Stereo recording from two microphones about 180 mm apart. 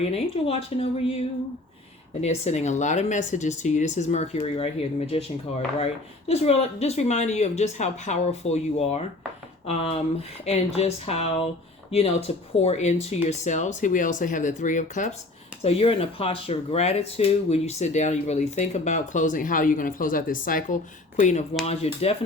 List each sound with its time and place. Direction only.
0.1 s speech: 35° left (ahead or behind)
2.2 s speech: 40° left (ahead or behind)
10.4 s speech: 35° left (ahead or behind)
15.6 s speech: 30° left (ahead or behind)